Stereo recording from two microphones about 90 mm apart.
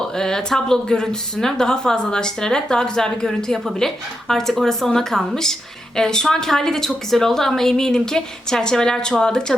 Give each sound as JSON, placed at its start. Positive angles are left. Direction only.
{"t": 0.2, "sound": "speech", "side_deg": 5}